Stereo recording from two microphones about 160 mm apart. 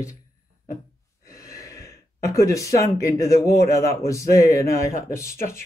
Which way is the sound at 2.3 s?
20° left (ahead or behind).